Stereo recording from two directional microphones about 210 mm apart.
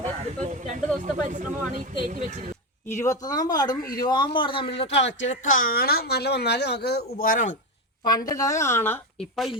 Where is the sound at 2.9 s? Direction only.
15° left (ahead or behind).